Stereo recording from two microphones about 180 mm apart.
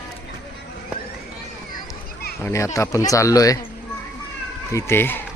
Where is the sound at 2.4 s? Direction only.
15° left (ahead or behind).